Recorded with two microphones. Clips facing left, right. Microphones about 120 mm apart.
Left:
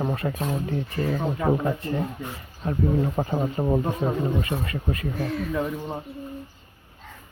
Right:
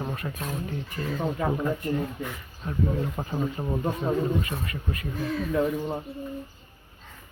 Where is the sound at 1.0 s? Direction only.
45° left (ahead or behind).